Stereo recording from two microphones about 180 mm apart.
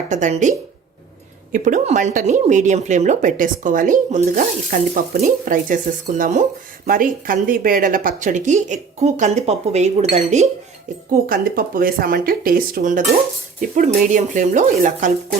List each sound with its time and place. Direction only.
0.1 s speech: 40° right (ahead or behind)
1.5 s speech: 45° right (ahead or behind)
11.3 s speech: 55° right (ahead or behind)